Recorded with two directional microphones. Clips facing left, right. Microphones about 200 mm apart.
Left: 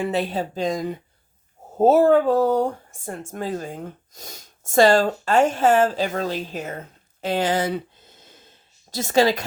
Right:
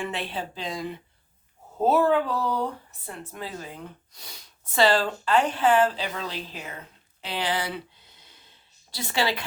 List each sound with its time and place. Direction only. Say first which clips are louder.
0.0 s speech: left 8 dB; 40° left (ahead or behind)